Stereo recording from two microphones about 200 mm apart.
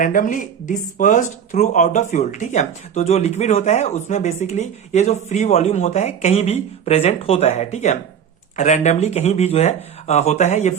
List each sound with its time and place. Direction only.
0.0 s speech: 40° left (ahead or behind)